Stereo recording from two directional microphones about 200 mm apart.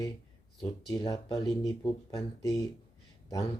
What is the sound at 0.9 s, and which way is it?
Speech, 20° left (ahead or behind).